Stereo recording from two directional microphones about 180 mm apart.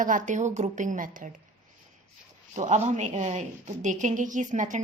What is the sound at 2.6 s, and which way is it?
A woman's voice, 40° right (ahead or behind).